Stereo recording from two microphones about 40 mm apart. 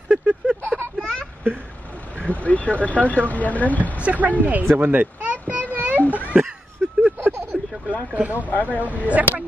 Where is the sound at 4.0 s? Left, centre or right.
Right.